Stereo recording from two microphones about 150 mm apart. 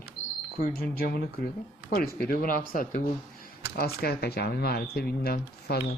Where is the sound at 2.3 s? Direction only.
70° left (ahead or behind).